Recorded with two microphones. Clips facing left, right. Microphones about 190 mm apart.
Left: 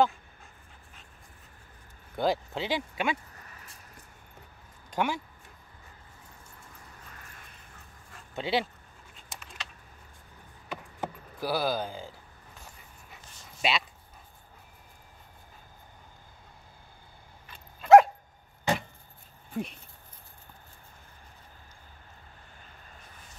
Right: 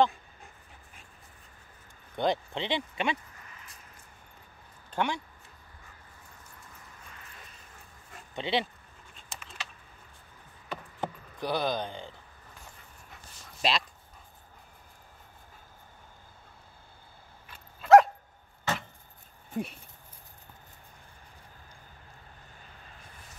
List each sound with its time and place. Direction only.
2.1 s speech: 5° left (ahead or behind)
4.9 s speech: 5° left (ahead or behind)
7.2 s a sound: 50° left (ahead or behind)
8.4 s speech: 5° left (ahead or behind)
10.7 s a sound: 5° left (ahead or behind)
13.6 s speech: 5° left (ahead or behind)
17.5 s dog: centre (ahead or behind)
18.7 s a sound: 15° left (ahead or behind)
19.5 s speech: 5° right (ahead or behind)